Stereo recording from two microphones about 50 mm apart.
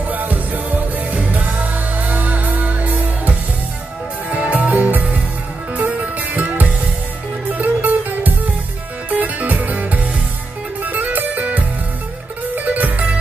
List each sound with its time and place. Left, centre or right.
0.1 s music: right